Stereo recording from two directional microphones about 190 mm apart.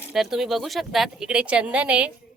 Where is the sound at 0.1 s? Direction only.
Centre (ahead or behind).